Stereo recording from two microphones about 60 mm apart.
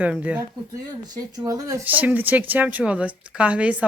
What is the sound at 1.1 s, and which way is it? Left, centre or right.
Speech, right.